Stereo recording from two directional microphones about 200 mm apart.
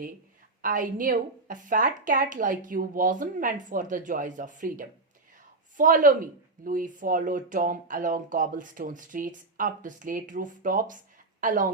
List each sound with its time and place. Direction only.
0.6 s a woman's voice: 45° right (ahead or behind)